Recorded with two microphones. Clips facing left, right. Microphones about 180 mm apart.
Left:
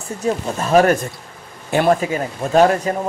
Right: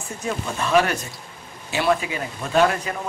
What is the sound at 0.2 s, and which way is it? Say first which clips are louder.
Speech: left 6 dB; 40° left (ahead or behind).